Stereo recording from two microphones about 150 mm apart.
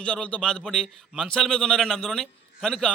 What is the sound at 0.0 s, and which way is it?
A man's voice, 5° left (ahead or behind).